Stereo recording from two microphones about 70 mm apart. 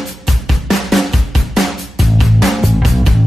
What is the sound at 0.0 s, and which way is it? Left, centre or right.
Drum, centre.